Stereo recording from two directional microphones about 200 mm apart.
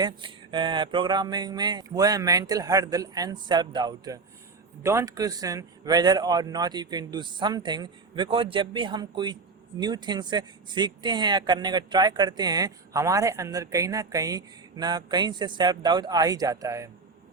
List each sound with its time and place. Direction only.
0.0 s speech: 25° right (ahead or behind)